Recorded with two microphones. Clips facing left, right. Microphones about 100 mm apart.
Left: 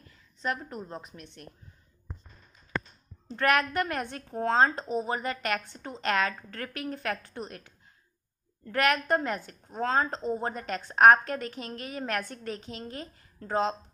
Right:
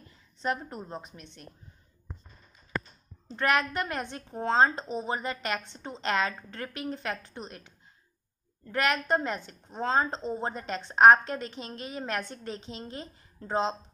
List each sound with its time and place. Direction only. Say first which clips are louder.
0.4 s a woman's voice: right 1 dB; 25° right (ahead or behind)
3.3 s a woman's voice: left 1 dB; 20° right (ahead or behind)